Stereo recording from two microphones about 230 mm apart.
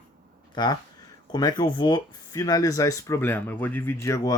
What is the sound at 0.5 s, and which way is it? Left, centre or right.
Speech, centre.